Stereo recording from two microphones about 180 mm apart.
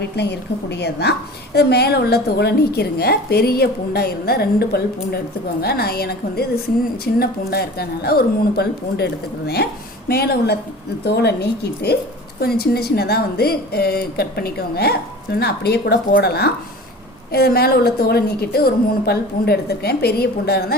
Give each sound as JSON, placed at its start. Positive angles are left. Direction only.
{"t": 0.0, "sound": "a woman's voice", "side_deg": 70}
{"t": 10.1, "sound": "speech", "side_deg": 60}